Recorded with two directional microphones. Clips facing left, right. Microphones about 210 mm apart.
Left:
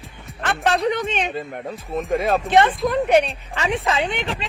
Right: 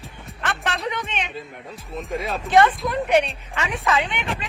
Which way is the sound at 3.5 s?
30° left (ahead or behind).